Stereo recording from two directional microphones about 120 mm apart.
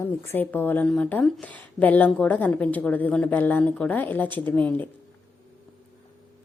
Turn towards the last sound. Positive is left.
turn(degrees=15)  # may be behind; listen again after turning